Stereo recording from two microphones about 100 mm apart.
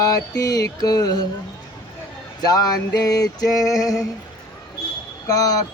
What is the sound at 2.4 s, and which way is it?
Music, 40° left (ahead or behind).